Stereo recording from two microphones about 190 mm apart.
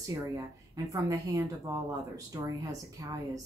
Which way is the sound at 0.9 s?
15° right (ahead or behind).